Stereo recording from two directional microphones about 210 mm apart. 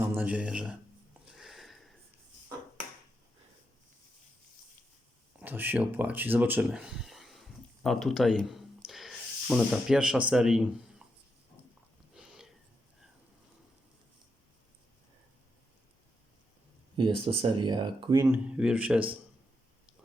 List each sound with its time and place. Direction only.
0.0 s speech: 10° right (ahead or behind)
1.2 s a sound: centre (ahead or behind)
5.4 s speech: 10° right (ahead or behind)
12.1 s sniff: 5° right (ahead or behind)
17.0 s speech: 25° right (ahead or behind); by 19.0 s 5° right (ahead or behind)